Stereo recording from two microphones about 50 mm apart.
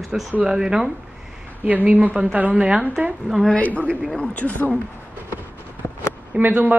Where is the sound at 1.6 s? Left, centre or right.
Right.